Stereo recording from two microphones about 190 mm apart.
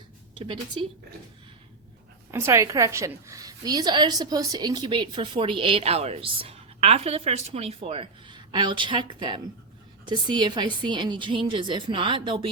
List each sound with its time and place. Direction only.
0.3 s a woman's voice: 25° right (ahead or behind)
2.3 s a woman's voice: 15° right (ahead or behind)